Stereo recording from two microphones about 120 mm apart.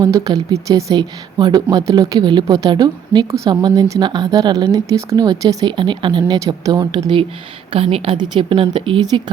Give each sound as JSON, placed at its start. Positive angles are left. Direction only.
{"t": 0.0, "sound": "speech", "side_deg": -30}